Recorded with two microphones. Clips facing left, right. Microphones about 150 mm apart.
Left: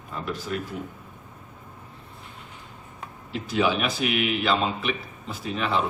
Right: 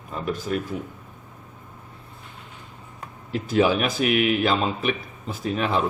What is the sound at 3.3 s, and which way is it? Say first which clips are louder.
Speech: right 4 dB; 45° right (ahead or behind).